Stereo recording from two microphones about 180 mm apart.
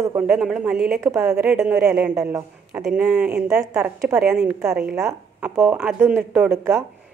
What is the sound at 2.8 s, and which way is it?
A woman's voice, 5° right (ahead or behind).